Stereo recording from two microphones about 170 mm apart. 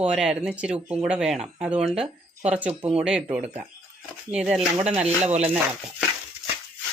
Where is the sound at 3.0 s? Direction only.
5° right (ahead or behind).